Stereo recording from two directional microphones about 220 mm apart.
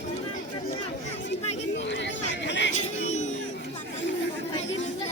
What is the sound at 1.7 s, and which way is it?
Chatter, 55° left (ahead or behind).